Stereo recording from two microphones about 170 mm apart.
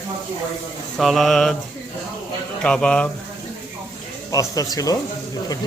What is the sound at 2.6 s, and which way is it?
Mantra, 5° left (ahead or behind).